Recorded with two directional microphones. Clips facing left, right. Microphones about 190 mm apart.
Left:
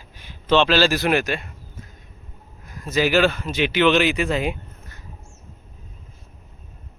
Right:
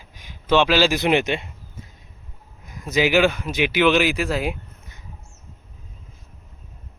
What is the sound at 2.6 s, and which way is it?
A man's voice, 15° right (ahead or behind).